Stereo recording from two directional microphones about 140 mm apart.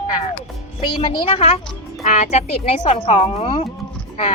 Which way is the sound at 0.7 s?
35° left (ahead or behind).